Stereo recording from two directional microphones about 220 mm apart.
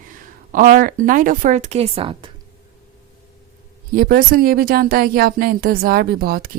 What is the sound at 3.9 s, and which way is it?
Speech, 40° right (ahead or behind).